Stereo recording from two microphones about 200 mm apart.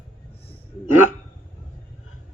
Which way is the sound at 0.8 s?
90° left.